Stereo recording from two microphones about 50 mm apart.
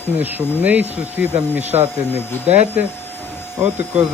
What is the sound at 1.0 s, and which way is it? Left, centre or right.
Speech, right.